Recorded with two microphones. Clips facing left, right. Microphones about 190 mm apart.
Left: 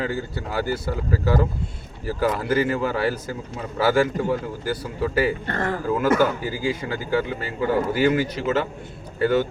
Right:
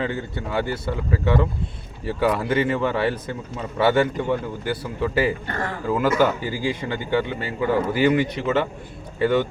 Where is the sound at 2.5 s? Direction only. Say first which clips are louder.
Right 1 dB; centre (ahead or behind).